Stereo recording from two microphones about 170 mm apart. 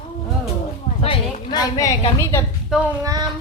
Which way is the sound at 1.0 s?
30° left (ahead or behind).